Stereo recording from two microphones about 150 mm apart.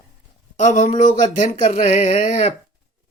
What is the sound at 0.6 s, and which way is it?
Speech, 55° left (ahead or behind).